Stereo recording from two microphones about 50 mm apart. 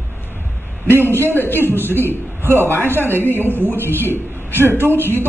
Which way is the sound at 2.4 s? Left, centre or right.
Right.